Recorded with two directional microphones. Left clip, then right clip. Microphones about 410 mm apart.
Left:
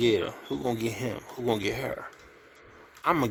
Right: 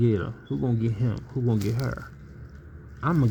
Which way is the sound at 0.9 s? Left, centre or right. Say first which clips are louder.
Even; centre.